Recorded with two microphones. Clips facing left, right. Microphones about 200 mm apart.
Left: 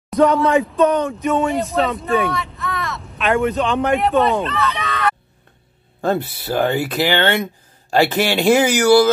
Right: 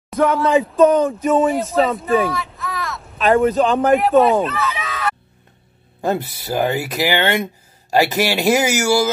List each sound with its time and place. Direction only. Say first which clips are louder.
0.1 s speech: left 1 dB; centre (ahead or behind)
3.2 s a man's voice: right 3 dB; 35° right (ahead or behind)
3.8 s speech: right 3 dB; centre (ahead or behind)